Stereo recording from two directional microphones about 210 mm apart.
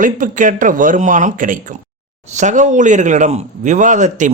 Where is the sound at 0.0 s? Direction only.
40° right (ahead or behind).